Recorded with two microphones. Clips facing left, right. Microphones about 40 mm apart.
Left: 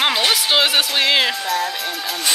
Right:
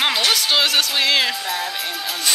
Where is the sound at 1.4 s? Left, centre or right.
Centre.